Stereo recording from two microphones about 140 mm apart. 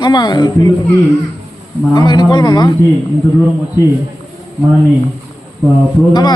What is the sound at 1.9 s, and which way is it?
Speech, 30° left (ahead or behind).